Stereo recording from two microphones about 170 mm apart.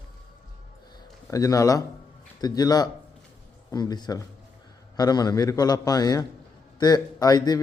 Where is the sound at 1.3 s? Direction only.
20° left (ahead or behind).